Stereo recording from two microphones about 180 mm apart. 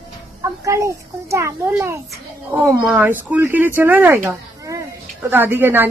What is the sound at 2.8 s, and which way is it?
Speech, 5° right (ahead or behind).